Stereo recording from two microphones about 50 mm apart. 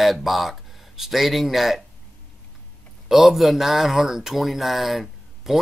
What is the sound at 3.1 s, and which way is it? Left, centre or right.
Speech, centre.